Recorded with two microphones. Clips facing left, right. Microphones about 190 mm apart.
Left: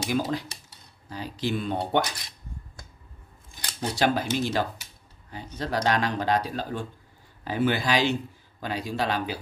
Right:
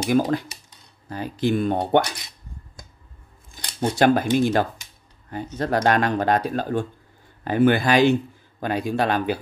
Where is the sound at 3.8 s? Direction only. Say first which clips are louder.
Right 7 dB; 55° right (ahead or behind).